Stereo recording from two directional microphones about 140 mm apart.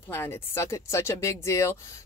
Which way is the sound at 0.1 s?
15° left (ahead or behind).